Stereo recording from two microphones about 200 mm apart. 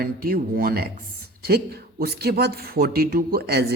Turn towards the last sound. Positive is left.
turn(degrees=-50)  # may be behind; listen again after turning